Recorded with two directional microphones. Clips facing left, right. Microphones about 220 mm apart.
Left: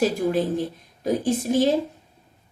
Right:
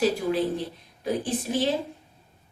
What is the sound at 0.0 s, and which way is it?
Speech, 45° left (ahead or behind).